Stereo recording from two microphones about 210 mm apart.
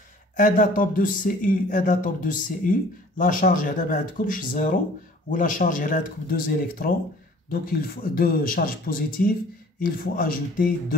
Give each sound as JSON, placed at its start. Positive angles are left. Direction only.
{"t": 0.4, "sound": "speech", "side_deg": 40}